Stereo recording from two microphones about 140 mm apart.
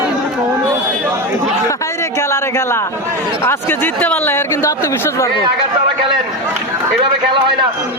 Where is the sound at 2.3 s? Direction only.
20° left (ahead or behind).